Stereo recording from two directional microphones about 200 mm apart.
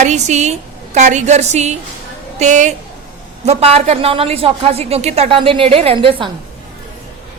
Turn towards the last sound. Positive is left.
turn(degrees=-25)  # may be behind; listen again after turning